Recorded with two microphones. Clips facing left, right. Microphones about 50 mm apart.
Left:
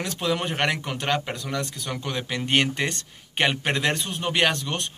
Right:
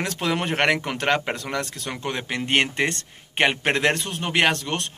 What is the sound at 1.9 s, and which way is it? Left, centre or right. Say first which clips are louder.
Speech: right 1 dB; right.